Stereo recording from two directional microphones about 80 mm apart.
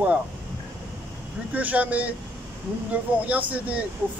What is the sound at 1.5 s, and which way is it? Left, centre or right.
Speech, centre.